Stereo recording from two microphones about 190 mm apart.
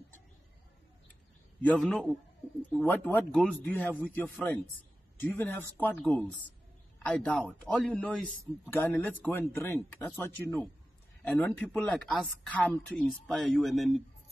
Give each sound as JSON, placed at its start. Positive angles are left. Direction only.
{"t": 1.6, "sound": "speech", "side_deg": 5}